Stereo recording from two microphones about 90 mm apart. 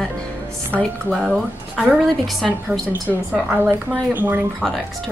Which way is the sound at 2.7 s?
20° right (ahead or behind).